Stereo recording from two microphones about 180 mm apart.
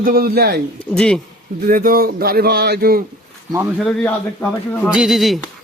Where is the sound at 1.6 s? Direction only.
50° right (ahead or behind).